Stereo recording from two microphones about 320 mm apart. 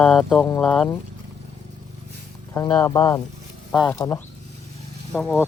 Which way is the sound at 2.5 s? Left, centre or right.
Centre.